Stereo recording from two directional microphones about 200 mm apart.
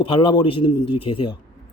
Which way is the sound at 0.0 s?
25° left (ahead or behind).